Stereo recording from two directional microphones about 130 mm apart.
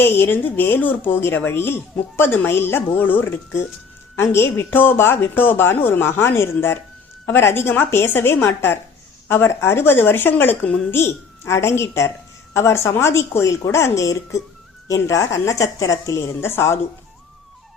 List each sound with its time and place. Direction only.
0.0 s a woman's voice: 15° left (ahead or behind)